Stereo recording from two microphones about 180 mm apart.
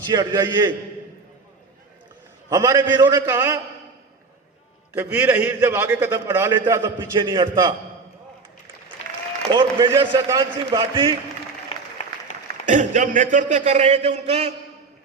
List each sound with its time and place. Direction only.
0.1 s a man's voice: 25° right (ahead or behind)
2.5 s a man's voice: 20° right (ahead or behind)
4.9 s a man's voice: 10° right (ahead or behind); by 7.7 s 25° right (ahead or behind)
9.5 s a man's voice: 25° right (ahead or behind)
10.8 s a man's voice: 30° right (ahead or behind)
12.6 s a man's voice: 45° right (ahead or behind)